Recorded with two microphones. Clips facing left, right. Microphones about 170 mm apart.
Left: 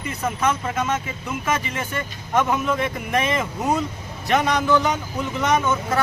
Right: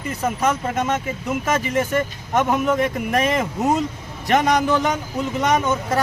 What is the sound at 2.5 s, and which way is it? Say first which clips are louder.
Speech: right 3 dB; 45° right (ahead or behind).